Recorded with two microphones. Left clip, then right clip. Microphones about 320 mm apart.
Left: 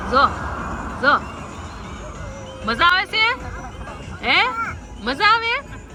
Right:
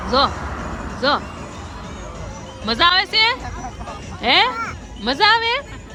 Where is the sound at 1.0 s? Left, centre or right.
Centre.